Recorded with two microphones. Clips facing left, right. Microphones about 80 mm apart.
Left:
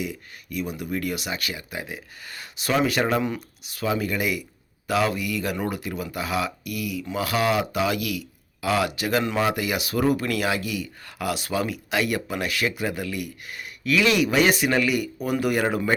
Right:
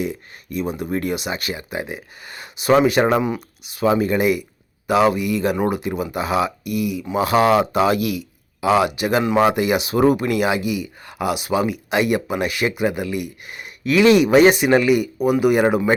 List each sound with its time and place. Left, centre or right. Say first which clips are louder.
0.0 s speech: right 6 dB; right